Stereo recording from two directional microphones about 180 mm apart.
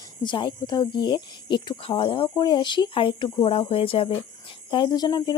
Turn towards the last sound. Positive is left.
turn(degrees=25)  # may be behind; listen again after turning